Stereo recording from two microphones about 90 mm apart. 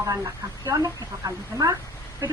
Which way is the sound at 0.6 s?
40° right (ahead or behind).